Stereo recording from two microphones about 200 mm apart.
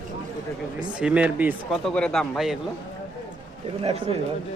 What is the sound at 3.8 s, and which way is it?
Speech, 30° right (ahead or behind).